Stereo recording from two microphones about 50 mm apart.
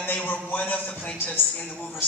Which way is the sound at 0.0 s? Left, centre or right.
Left.